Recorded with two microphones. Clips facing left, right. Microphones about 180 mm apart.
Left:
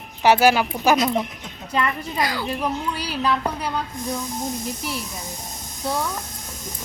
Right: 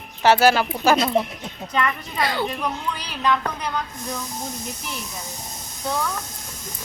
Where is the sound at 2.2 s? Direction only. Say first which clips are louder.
Right 3 dB; 25° right (ahead or behind).